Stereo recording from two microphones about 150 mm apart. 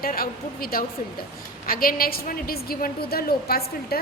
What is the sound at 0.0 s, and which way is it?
A woman's voice, 75° left (ahead or behind).